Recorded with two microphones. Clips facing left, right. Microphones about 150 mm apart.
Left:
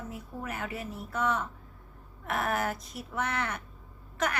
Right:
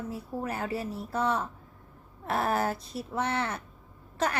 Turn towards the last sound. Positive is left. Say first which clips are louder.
# right 2 dB
turn(degrees=-30)  # may be behind; listen again after turning